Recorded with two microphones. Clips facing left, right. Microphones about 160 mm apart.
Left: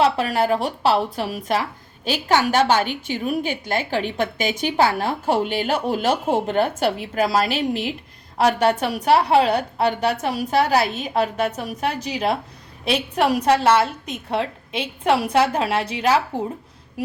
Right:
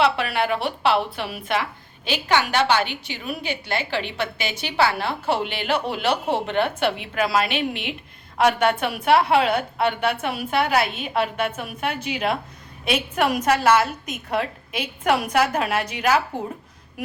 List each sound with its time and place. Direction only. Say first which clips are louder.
0.0 s a woman's voice: left 2 dB; 40° left (ahead or behind)